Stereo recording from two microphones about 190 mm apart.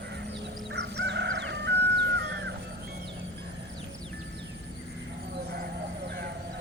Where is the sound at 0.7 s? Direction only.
65° right (ahead or behind).